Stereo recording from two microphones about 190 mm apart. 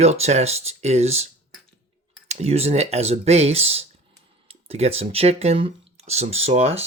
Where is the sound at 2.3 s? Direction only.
35° right (ahead or behind).